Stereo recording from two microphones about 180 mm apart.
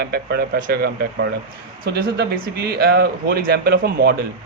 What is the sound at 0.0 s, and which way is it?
Speech, 60° right (ahead or behind).